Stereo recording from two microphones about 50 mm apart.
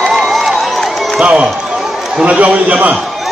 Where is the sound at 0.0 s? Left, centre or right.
Centre.